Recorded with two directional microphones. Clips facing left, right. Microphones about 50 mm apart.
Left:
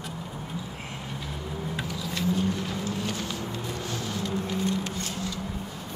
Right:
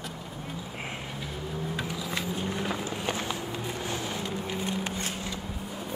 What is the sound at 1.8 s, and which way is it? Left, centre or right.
Vehicle, centre.